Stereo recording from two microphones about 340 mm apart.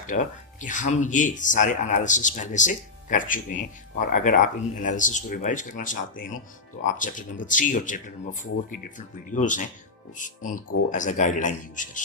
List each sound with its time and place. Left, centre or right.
0.1 s speech: left